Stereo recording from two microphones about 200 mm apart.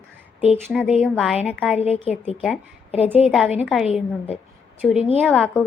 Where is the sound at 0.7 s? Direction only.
Centre (ahead or behind).